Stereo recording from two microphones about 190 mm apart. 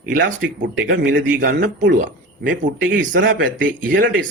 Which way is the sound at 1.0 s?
45° right (ahead or behind).